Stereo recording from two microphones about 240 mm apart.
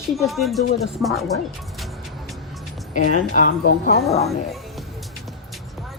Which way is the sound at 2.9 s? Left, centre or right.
Left.